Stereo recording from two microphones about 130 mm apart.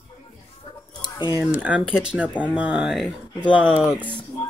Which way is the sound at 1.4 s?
10° right (ahead or behind).